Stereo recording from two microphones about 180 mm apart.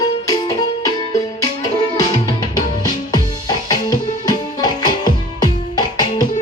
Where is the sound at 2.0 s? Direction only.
25° left (ahead or behind).